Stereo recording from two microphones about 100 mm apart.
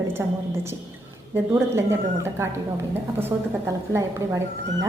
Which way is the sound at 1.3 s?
25° right (ahead or behind).